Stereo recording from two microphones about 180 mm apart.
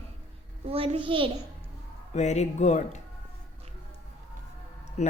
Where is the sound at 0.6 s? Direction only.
30° right (ahead or behind).